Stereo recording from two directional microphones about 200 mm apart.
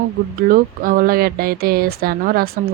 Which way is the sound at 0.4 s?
45° right (ahead or behind).